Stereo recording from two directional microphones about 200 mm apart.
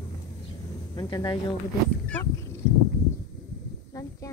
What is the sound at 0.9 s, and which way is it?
Speech, 20° left (ahead or behind).